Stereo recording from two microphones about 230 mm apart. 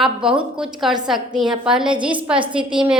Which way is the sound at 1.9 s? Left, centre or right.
Right.